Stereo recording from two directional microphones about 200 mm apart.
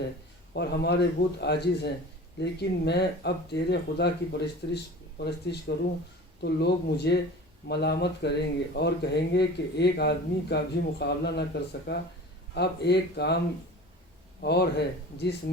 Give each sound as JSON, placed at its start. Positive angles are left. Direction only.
{"t": 0.5, "sound": "speech", "side_deg": 55}
{"t": 14.4, "sound": "speech", "side_deg": 55}